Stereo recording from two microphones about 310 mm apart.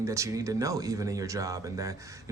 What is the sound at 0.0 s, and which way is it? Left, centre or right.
Speech, centre.